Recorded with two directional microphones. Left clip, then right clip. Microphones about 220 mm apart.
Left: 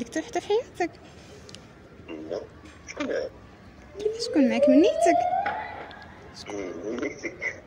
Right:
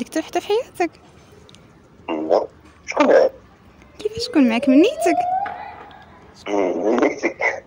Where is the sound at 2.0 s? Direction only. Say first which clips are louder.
Right 16 dB; 45° right (ahead or behind).